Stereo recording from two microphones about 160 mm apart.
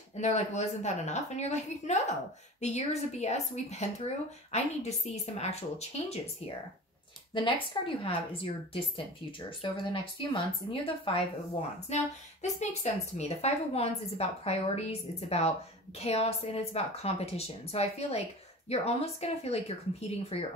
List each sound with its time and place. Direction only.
0.1 s a woman's voice: 45° left (ahead or behind)
11.9 s a woman's voice: 45° left (ahead or behind)